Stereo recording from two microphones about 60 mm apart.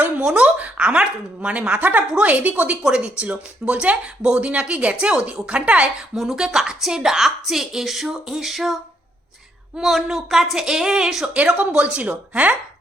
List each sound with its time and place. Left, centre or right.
0.2 s speech: centre
6.1 s a woman's voice: centre
11.3 s speech: right